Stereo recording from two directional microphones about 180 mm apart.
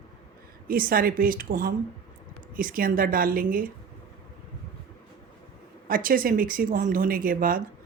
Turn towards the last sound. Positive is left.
turn(degrees=-50)  # may be behind; listen again after turning